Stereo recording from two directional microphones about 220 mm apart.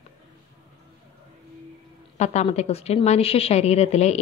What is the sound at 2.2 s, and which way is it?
A woman's voice, 30° left (ahead or behind).